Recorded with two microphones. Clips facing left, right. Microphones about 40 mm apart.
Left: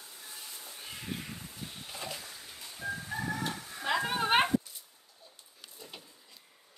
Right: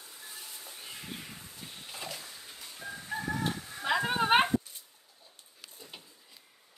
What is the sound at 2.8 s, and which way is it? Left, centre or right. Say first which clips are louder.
Crowing: left 5 dB; centre.